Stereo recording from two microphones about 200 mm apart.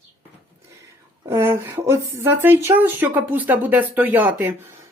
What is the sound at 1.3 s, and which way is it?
Speech, 10° right (ahead or behind).